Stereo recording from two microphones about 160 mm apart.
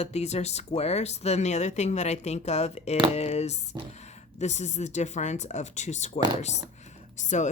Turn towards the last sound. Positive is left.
turn(degrees=50)  # may be behind; listen again after turning